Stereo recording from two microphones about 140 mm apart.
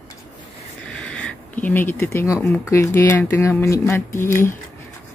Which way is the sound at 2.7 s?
20° left (ahead or behind).